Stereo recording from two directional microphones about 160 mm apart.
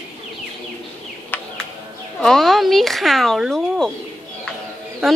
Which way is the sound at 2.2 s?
Centre (ahead or behind).